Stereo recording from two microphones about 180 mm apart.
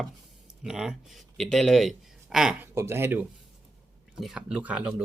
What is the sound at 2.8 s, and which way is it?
Speech, 15° right (ahead or behind).